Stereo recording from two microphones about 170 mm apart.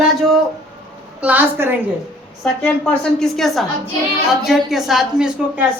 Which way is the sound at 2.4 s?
5° left (ahead or behind).